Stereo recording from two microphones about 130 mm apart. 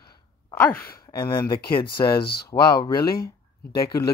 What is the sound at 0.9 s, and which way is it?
Speech, 30° left (ahead or behind).